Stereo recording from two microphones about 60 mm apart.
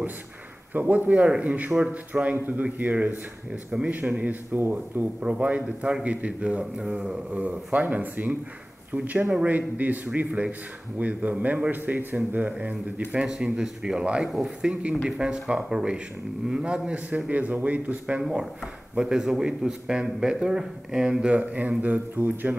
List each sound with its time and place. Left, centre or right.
0.7 s speech: right
2.3 s a man's voice: right
5.2 s a man's voice: right; by 14.7 s centre
14.7 s speech: centre
18.4 s speech: centre; by 22.6 s right